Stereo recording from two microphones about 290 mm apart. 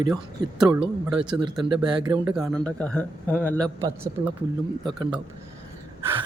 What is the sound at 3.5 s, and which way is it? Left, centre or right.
Speech, centre.